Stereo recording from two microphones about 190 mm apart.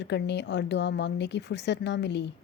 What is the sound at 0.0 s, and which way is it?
Speech, 65° left (ahead or behind).